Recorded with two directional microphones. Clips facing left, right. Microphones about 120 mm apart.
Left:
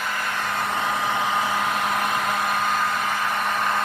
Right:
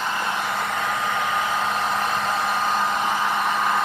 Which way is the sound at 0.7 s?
15° left (ahead or behind).